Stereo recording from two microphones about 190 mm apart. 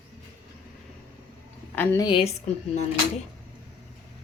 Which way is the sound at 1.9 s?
25° left (ahead or behind).